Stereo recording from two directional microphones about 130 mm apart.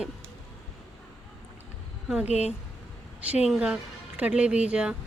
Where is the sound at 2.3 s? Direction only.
55° left (ahead or behind).